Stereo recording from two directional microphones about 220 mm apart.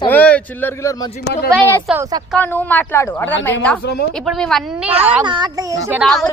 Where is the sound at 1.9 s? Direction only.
15° right (ahead or behind).